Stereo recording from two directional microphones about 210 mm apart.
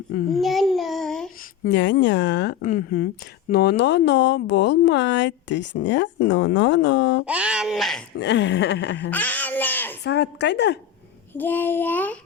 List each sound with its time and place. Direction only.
0.3 s child singing: centre (ahead or behind)
1.7 s speech: 55° left (ahead or behind)
7.3 s speech: 5° right (ahead or behind)
8.2 s speech: 55° left (ahead or behind)
9.0 s a child's voice: 10° left (ahead or behind)
10.0 s speech: 55° left (ahead or behind)
11.3 s a child's voice: 10° left (ahead or behind)